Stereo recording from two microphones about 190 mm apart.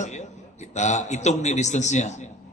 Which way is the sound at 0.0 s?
35° left (ahead or behind).